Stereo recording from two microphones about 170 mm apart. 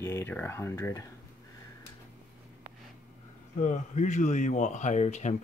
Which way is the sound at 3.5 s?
45° left (ahead or behind).